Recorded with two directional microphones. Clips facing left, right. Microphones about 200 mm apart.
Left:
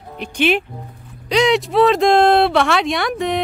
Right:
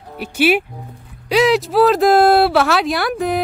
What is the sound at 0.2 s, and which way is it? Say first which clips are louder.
Speech: right 2 dB; 5° right (ahead or behind).